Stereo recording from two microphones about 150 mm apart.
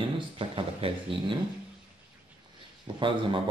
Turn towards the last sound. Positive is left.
turn(degrees=-35)  # may be behind; listen again after turning